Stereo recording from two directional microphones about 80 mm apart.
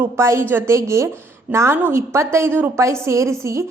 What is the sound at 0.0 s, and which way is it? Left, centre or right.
A woman's voice, right.